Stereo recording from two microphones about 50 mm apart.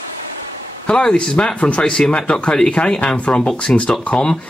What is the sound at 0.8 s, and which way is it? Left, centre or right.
Speech, left.